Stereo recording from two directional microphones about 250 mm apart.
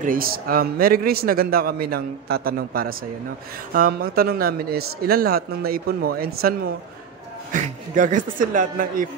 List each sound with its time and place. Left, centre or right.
0.0 s speech: right